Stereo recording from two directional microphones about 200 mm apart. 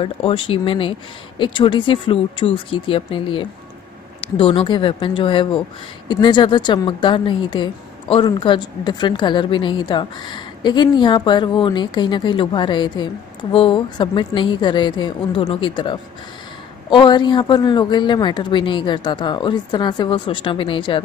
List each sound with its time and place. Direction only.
0.0 s speech: 25° left (ahead or behind)